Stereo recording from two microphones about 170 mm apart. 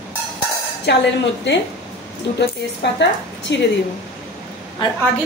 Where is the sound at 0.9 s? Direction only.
90° left.